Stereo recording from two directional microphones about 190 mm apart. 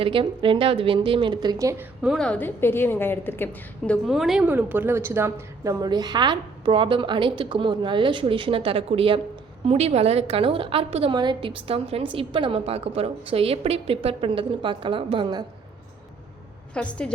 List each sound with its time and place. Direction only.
0.0 s a woman's voice: 25° right (ahead or behind)
2.0 s a woman's voice: centre (ahead or behind); by 15.4 s 25° right (ahead or behind)
16.7 s a woman's voice: 5° left (ahead or behind)